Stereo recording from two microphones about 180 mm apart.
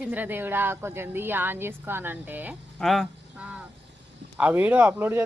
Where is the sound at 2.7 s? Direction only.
Centre (ahead or behind).